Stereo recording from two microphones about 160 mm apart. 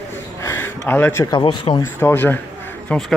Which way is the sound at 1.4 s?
30° left (ahead or behind).